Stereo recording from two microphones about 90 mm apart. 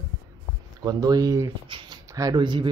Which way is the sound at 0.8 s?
45° right (ahead or behind).